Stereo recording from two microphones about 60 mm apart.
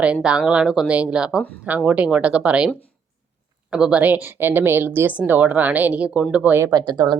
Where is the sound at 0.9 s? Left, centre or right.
Right.